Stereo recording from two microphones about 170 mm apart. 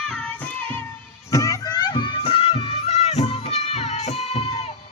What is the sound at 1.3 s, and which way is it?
Music, 20° left (ahead or behind).